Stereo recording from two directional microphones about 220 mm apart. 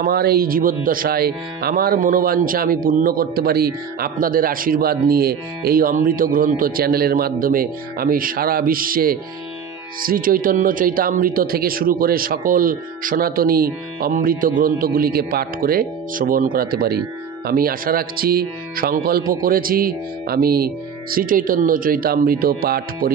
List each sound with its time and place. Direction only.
0.0 s speech: 45° right (ahead or behind)